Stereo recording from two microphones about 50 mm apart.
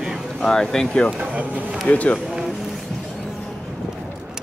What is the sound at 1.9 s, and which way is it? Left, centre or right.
Speech, left.